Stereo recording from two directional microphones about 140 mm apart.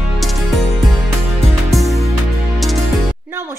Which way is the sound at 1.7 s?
Centre (ahead or behind).